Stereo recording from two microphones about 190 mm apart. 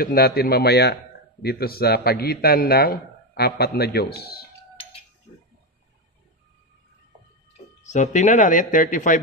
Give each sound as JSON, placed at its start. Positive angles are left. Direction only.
{"t": 0.0, "sound": "a man's voice", "side_deg": 50}
{"t": 7.8, "sound": "speech", "side_deg": 40}